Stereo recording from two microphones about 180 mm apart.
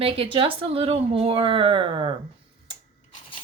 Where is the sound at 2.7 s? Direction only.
25° right (ahead or behind).